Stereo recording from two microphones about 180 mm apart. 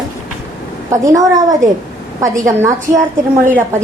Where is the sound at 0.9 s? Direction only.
20° right (ahead or behind).